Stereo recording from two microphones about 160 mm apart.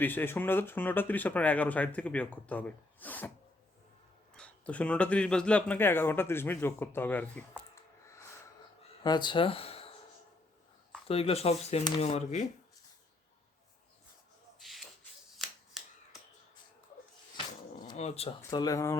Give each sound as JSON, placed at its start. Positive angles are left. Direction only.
{"t": 0.0, "sound": "speech", "side_deg": 10}
{"t": 4.4, "sound": "speech", "side_deg": 10}
{"t": 9.0, "sound": "speech", "side_deg": 30}
{"t": 11.1, "sound": "speech", "side_deg": 40}
{"t": 14.6, "sound": "a sound", "side_deg": 0}
{"t": 17.3, "sound": "a sound", "side_deg": 30}
{"t": 17.9, "sound": "speech", "side_deg": 40}
{"t": 18.5, "sound": "speech", "side_deg": 20}